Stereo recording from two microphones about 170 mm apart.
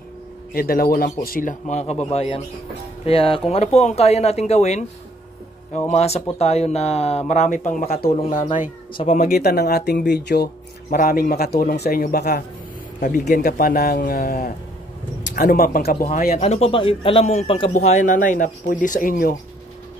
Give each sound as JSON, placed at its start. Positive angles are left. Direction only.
{"t": 0.6, "sound": "speech", "side_deg": 60}
{"t": 5.9, "sound": "speech", "side_deg": 40}
{"t": 7.8, "sound": "speech", "side_deg": 65}
{"t": 8.9, "sound": "speech", "side_deg": 40}
{"t": 9.3, "sound": "speech", "side_deg": 65}
{"t": 13.0, "sound": "speech", "side_deg": 50}
{"t": 13.4, "sound": "speech", "side_deg": 60}
{"t": 16.3, "sound": "speech", "side_deg": 40}
{"t": 17.7, "sound": "speech", "side_deg": 45}